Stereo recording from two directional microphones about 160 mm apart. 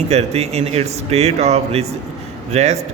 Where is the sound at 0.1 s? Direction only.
40° right (ahead or behind).